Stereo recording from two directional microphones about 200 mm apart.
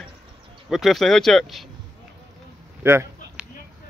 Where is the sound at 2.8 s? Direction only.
10° right (ahead or behind).